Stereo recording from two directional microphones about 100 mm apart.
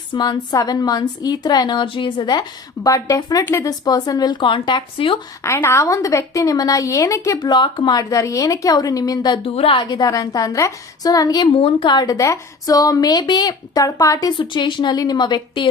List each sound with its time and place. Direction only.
0.1 s a woman's voice: 45° left (ahead or behind)
3.4 s a woman's voice: 30° left (ahead or behind); by 5.2 s 60° left (ahead or behind)
5.4 s a woman's voice: 30° left (ahead or behind)
7.5 s a woman's voice: 50° left (ahead or behind)
8.1 s a woman's voice: 35° left (ahead or behind)
9.4 s a woman's voice: 65° left (ahead or behind)
9.9 s a woman's voice: 35° left (ahead or behind)
11.5 s a woman's voice: 65° left (ahead or behind)
11.9 s a woman's voice: 40° left (ahead or behind)
14.3 s a woman's voice: 50° left (ahead or behind)